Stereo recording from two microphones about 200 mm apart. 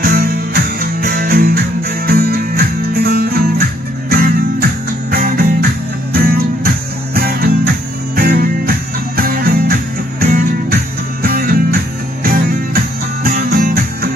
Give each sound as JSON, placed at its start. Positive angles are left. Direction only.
{"t": 0.0, "sound": "music", "side_deg": -50}